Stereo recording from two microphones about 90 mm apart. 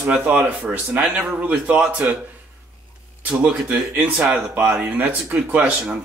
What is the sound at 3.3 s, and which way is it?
Speech, 15° right (ahead or behind).